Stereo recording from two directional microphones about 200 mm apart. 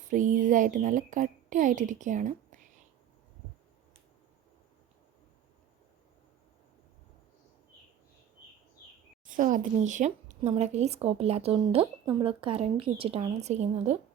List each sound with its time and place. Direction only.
0.1 s a woman's voice: 40° right (ahead or behind)
9.3 s a woman's voice: 40° right (ahead or behind)